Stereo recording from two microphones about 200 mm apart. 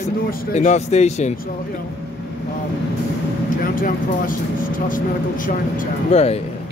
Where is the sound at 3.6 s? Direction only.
45° left (ahead or behind).